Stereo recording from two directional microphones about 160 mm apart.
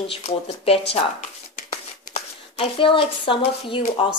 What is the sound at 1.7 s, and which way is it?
Shuffling cards, 40° left (ahead or behind).